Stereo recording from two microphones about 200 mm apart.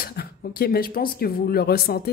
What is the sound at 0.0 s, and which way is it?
Speech, 50° left (ahead or behind).